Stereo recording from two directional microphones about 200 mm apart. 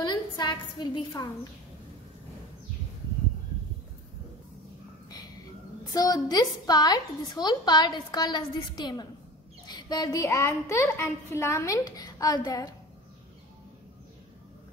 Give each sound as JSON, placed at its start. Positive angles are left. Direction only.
{"t": 0.0, "sound": "a woman's voice", "side_deg": 20}
{"t": 5.9, "sound": "a woman's voice", "side_deg": 15}